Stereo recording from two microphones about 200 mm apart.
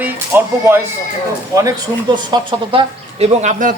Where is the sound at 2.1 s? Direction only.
25° right (ahead or behind); by 3.7 s 40° right (ahead or behind).